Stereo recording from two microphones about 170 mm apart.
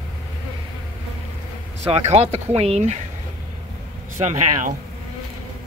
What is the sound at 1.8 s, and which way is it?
Speech, 40° right (ahead or behind).